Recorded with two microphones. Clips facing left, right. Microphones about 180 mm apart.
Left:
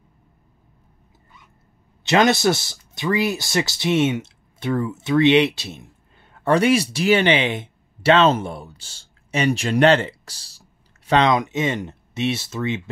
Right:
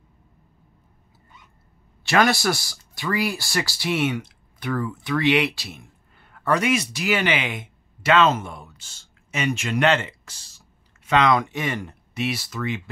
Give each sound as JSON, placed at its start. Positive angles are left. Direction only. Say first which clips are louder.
{"t": 2.0, "sound": "speech", "louder": "left 3 dB", "side_deg": 20}